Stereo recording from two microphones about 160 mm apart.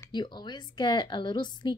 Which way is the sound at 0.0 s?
25° left (ahead or behind).